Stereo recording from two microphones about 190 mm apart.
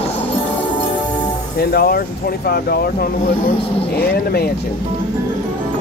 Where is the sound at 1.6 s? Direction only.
55° left (ahead or behind).